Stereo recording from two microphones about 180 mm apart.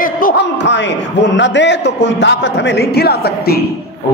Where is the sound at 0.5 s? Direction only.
75° left (ahead or behind); by 3.6 s 60° left (ahead or behind).